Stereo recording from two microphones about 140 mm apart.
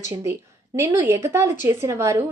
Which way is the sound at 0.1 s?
20° right (ahead or behind).